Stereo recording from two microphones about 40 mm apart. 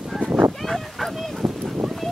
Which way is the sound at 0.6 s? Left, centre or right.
Centre.